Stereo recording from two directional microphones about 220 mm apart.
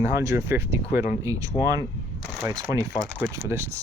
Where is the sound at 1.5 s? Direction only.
25° left (ahead or behind).